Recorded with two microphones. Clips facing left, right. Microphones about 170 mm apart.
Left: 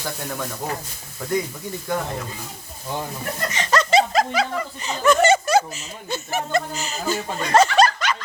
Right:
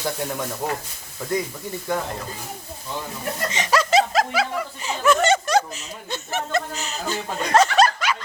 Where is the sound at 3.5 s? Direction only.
15° right (ahead or behind).